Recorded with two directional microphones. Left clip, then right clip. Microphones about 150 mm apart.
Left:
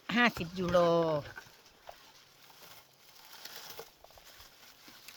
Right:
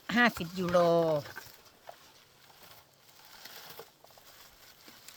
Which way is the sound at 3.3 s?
35° left (ahead or behind).